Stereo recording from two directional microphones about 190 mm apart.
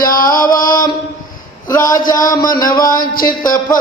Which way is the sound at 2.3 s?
15° left (ahead or behind).